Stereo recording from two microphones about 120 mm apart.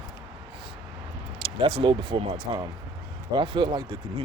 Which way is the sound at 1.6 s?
50° right (ahead or behind).